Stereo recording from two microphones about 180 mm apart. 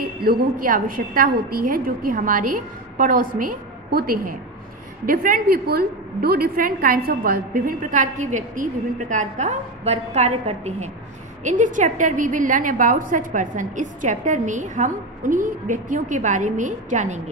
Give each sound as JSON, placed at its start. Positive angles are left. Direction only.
{"t": 0.0, "sound": "a woman's voice", "side_deg": -55}